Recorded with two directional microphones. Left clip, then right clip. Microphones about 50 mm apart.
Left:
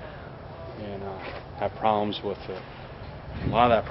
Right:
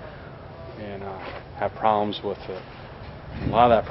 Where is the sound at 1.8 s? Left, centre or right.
Centre.